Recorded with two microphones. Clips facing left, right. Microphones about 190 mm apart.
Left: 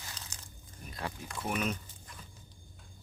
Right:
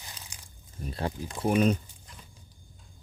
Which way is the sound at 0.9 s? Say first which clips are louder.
Right 7 dB; 30° right (ahead or behind).